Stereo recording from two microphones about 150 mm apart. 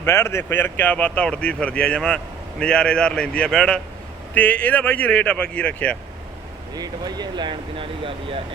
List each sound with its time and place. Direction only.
0.0 s speech: 15° left (ahead or behind)
6.7 s speech: 25° right (ahead or behind)